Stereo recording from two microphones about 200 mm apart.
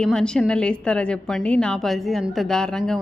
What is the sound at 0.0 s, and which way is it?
A woman's voice, 5° left (ahead or behind).